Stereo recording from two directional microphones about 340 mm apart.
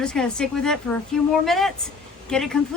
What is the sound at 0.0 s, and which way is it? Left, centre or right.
A woman's voice, centre.